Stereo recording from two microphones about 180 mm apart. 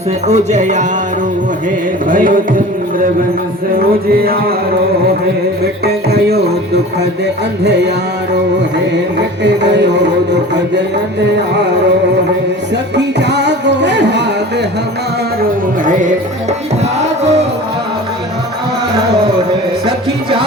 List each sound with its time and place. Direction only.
0.3 s music: 40° right (ahead or behind)
2.0 s music: 50° right (ahead or behind)
3.8 s a sound: 55° right (ahead or behind)
5.8 s a sound: 60° right (ahead or behind)
7.6 s music: 70° right (ahead or behind)
9.1 s music: 75° right (ahead or behind)
12.7 s music: 70° right (ahead or behind)
15.8 s music: 45° right (ahead or behind)